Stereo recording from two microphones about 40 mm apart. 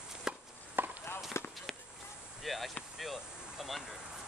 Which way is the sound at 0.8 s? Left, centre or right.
Right.